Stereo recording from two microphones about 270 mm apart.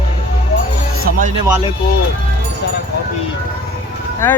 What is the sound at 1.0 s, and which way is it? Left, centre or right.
Speech, right.